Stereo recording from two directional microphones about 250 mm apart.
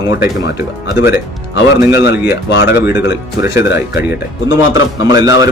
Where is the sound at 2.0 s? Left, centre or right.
Left.